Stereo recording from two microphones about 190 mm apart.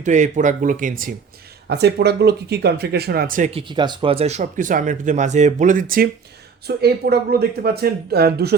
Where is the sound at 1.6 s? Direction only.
60° right (ahead or behind); by 3.5 s 45° right (ahead or behind).